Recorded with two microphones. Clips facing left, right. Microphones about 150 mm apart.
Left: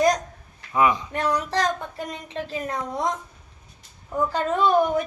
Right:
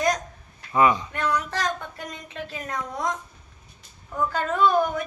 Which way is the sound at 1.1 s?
35° left (ahead or behind).